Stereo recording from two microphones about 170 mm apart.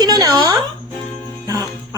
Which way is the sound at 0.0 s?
20° right (ahead or behind).